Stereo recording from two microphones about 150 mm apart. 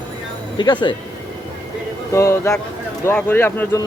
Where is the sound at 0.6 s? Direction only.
30° left (ahead or behind).